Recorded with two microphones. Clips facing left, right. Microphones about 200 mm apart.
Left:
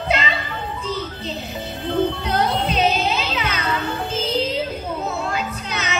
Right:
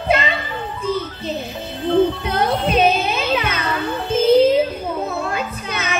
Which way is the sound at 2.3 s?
55° right (ahead or behind).